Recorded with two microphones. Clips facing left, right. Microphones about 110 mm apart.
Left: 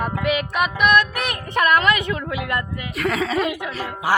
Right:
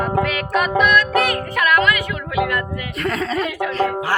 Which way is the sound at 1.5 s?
25° left (ahead or behind).